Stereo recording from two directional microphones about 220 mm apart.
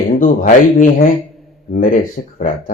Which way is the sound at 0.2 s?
40° left (ahead or behind).